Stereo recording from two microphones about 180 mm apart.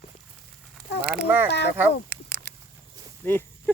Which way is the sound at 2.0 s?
60° right (ahead or behind).